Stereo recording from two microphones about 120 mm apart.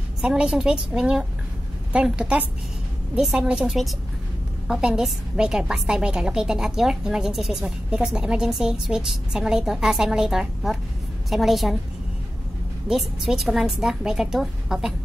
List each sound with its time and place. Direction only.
0.2 s a woman's voice: 5° right (ahead or behind)
12.8 s a woman's voice: 5° right (ahead or behind)